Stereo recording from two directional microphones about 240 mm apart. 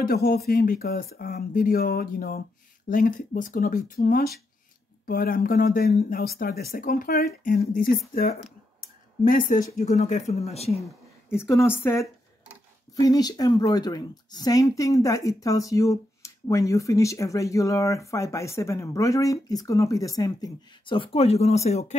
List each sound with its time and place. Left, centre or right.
0.0 s speech: left
10.8 s a woman's voice: centre; by 21.9 s left